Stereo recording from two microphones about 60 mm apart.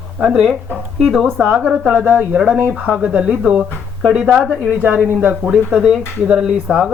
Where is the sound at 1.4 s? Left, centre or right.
Centre.